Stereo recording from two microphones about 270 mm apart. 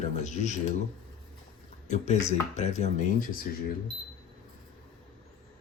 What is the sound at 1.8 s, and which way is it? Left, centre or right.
Speech, left.